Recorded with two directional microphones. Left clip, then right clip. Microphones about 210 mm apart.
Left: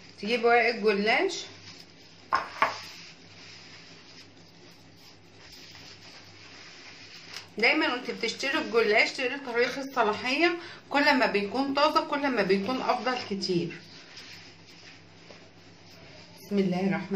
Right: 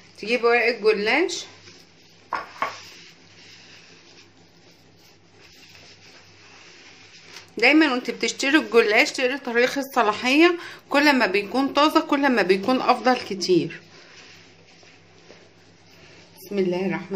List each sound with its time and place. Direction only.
0.2 s speech: 55° right (ahead or behind)
7.5 s speech: 55° right (ahead or behind)